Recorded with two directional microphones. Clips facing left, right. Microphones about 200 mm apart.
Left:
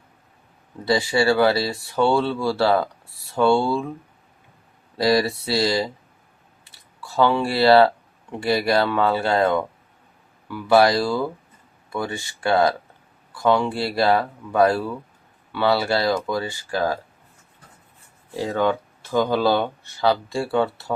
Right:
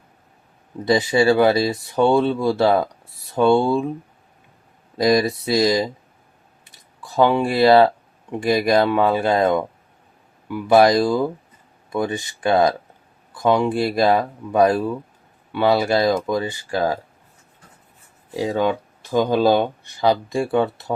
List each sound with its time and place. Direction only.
0.9 s speech: 20° right (ahead or behind)
4.9 s speech: 20° right (ahead or behind)
6.7 s a sound: 15° right (ahead or behind)
8.3 s speech: 15° right (ahead or behind)
18.3 s speech: 15° right (ahead or behind)